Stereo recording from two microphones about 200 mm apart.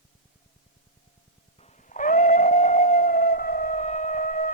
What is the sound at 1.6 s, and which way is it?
Dog, 35° left (ahead or behind).